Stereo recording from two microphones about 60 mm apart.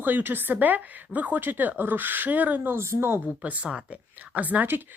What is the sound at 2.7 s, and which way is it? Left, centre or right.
Speech, right.